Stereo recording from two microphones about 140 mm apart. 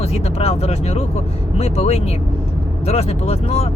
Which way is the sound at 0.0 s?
45° left (ahead or behind).